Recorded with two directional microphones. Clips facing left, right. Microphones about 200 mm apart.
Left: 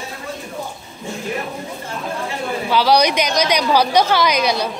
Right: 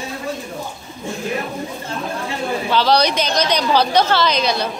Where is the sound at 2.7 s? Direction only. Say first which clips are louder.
Left 2 dB; 10° left (ahead or behind).